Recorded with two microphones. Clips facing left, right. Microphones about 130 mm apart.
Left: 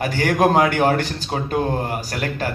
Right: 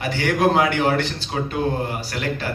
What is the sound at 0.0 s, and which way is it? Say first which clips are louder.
A man's voice: left 2 dB; 45° left (ahead or behind).